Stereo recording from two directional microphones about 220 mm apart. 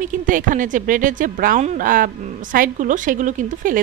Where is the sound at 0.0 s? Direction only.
35° right (ahead or behind).